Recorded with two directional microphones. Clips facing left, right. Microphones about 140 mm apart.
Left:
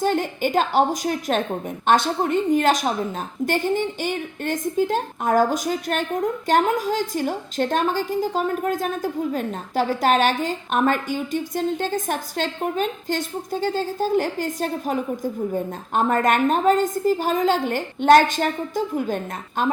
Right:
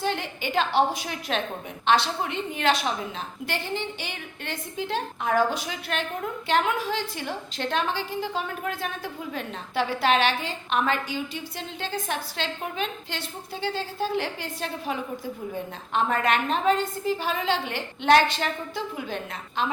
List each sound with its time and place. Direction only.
0.0 s a woman's voice: 45° left (ahead or behind)